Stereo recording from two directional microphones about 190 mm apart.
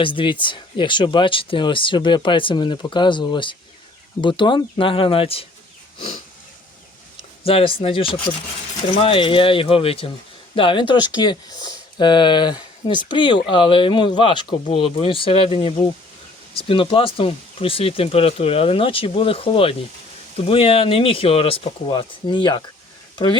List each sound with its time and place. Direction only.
0.0 s speech: 25° left (ahead or behind)
7.4 s speech: 30° left (ahead or behind)